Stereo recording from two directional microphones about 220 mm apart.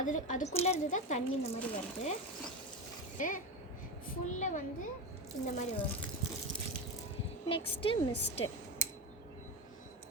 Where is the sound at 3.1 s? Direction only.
35° left (ahead or behind).